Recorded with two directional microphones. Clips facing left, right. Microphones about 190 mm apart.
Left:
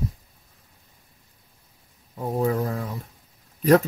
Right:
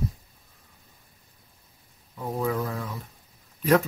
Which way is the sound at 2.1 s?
35° left (ahead or behind).